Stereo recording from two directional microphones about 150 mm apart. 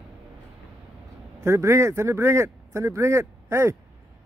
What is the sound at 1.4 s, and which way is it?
A man's voice, 20° right (ahead or behind).